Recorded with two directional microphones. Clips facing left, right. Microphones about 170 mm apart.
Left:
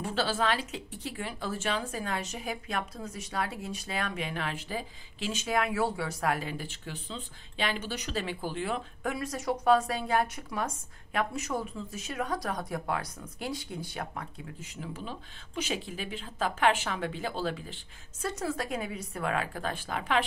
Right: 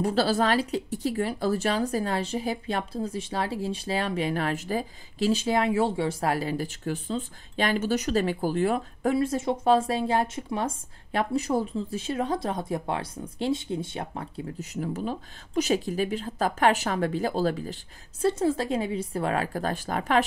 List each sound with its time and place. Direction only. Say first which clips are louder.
0.0 s speech: right 6 dB; 40° right (ahead or behind)
9.1 s speech: right 7 dB; 30° right (ahead or behind)
18.2 s speech: right 9 dB; 30° right (ahead or behind)